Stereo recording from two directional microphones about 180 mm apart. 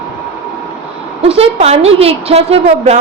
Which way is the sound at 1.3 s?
35° right (ahead or behind).